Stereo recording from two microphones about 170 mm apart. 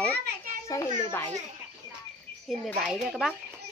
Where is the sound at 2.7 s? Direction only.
Centre (ahead or behind).